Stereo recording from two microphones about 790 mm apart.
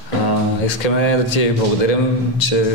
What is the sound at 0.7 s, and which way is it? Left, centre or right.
A man's voice, left.